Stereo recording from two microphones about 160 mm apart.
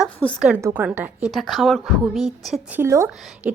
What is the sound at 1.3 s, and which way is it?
A woman's voice, centre (ahead or behind).